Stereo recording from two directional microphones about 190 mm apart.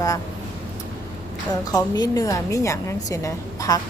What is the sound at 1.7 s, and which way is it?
A woman's voice, 15° left (ahead or behind).